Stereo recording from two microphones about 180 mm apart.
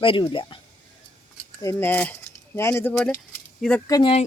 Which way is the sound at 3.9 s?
25° left (ahead or behind).